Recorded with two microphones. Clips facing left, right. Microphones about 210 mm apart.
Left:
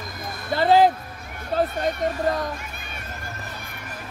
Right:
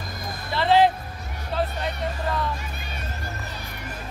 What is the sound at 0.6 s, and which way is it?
Music, 45° left (ahead or behind).